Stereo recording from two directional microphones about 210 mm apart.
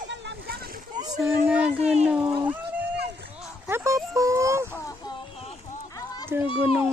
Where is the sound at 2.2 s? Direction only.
25° right (ahead or behind).